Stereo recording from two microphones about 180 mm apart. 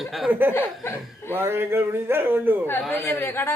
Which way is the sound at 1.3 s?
15° right (ahead or behind).